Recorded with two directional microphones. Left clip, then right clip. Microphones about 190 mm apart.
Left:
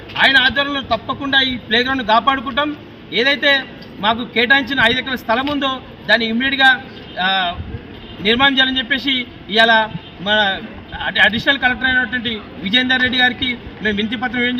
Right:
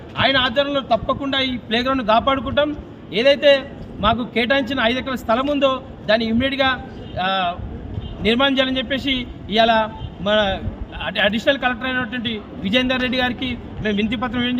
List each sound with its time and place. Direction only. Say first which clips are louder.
0.2 s a man's voice: left 4 dB; 30° right (ahead or behind)